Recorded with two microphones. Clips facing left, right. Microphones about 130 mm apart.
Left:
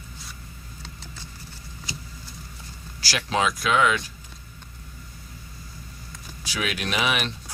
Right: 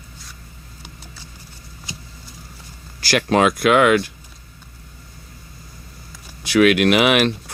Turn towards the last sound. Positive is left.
turn(degrees=-70)  # may be behind; listen again after turning